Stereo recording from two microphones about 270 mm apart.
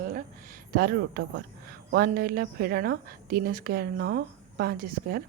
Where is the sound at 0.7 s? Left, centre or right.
Right.